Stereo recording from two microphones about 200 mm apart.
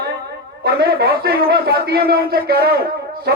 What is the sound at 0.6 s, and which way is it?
Speech, 50° right (ahead or behind).